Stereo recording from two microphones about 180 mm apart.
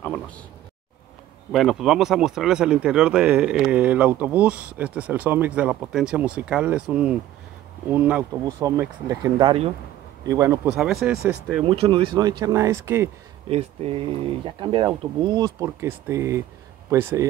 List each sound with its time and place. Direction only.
1.5 s speech: centre (ahead or behind); by 10.7 s 15° right (ahead or behind)
10.7 s speech: centre (ahead or behind)
11.6 s speech: 30° right (ahead or behind); by 13.1 s 15° right (ahead or behind)
13.5 s speech: 35° right (ahead or behind); by 17.3 s 15° right (ahead or behind)